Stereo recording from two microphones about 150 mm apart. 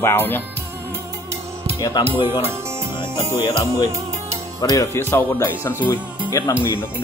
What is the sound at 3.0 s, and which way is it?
Music, 15° right (ahead or behind).